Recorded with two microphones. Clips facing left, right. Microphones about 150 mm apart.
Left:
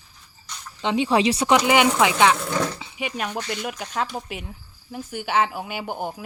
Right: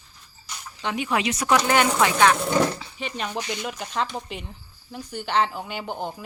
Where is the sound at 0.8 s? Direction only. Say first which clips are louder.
Left 5 dB; 25° left (ahead or behind).